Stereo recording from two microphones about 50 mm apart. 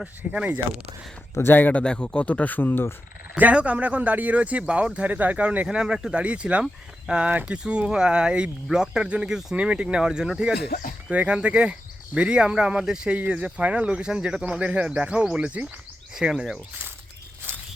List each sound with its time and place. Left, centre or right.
0.3 s speech: right
1.5 s speech: left
1.7 s speech: centre; by 2.8 s left
3.3 s speech: right
5.6 s speech: centre
7.3 s speech: right
7.5 s speech: right
11.1 s speech: right
16.1 s speech: centre